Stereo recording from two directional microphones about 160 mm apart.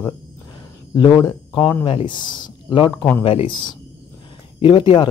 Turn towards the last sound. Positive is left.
turn(degrees=30)  # may be behind; listen again after turning